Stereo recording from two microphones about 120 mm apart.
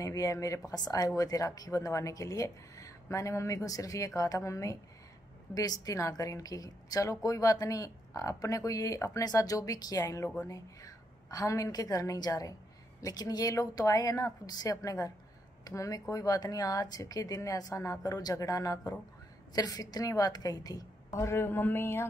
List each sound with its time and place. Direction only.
0.0 s a woman's voice: 30° left (ahead or behind)